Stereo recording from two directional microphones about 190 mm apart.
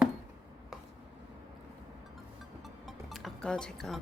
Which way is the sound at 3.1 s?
Centre (ahead or behind).